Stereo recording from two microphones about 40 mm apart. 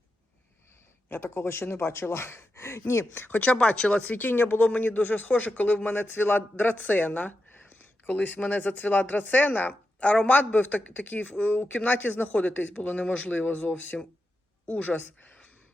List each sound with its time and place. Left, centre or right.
1.0 s speech: left
3.3 s speech: left
3.6 s speech: left
4.0 s speech: left
7.7 s a sound: left
8.4 s speech: left